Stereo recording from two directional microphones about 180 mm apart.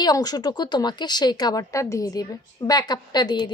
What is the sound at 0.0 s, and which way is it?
Speech, 20° left (ahead or behind).